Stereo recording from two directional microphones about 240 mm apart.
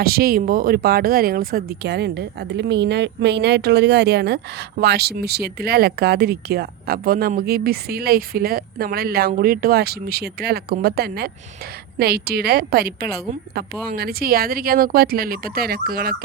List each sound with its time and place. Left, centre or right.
0.0 s speech: right